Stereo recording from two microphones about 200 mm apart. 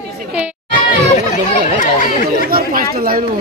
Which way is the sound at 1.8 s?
40° left (ahead or behind).